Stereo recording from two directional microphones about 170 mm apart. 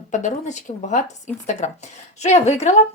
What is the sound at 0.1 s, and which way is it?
A woman's voice, 45° left (ahead or behind).